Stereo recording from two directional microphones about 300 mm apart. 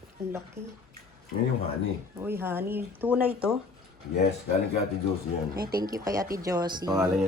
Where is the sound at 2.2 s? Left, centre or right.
Centre.